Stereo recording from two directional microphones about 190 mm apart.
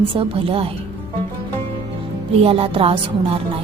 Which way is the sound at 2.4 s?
30° right (ahead or behind).